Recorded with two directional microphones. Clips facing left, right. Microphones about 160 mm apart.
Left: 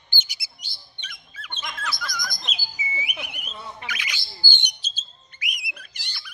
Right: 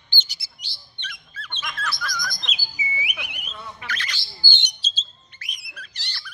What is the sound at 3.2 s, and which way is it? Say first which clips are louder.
Alarm: left 1 dB; 45° left (ahead or behind).